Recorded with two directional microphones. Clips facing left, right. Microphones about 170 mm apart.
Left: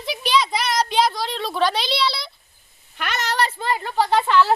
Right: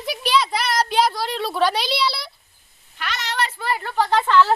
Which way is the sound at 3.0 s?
50° left (ahead or behind).